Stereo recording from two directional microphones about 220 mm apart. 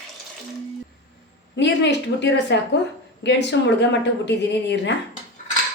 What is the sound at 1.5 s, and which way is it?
A woman's voice, 50° left (ahead or behind).